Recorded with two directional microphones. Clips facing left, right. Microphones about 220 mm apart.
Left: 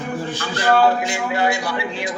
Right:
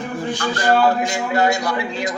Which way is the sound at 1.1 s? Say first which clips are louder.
Right 2 dB; 40° right (ahead or behind).